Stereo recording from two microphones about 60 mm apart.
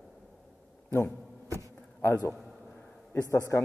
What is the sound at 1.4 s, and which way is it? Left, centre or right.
Insect, right.